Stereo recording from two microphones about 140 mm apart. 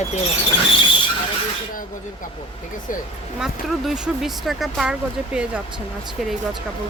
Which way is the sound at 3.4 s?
5° right (ahead or behind).